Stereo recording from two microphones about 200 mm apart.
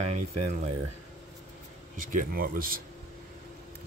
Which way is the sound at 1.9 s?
40° right (ahead or behind).